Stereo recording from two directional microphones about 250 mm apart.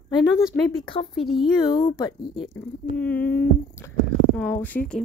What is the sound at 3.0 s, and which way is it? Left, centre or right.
Speech, centre.